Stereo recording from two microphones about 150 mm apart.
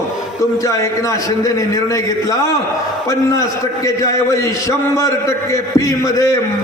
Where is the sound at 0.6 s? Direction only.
20° left (ahead or behind).